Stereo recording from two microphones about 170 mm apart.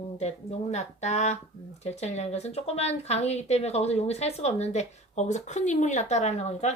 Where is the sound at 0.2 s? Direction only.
40° left (ahead or behind).